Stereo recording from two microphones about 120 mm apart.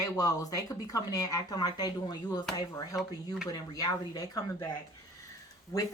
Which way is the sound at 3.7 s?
35° left (ahead or behind).